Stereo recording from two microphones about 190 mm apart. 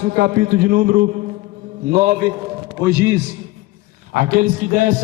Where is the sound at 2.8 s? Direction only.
15° right (ahead or behind).